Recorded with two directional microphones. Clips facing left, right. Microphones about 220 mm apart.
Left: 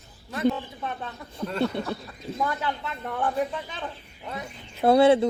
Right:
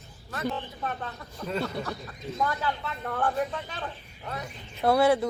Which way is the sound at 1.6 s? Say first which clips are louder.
Left 7 dB; 25° left (ahead or behind).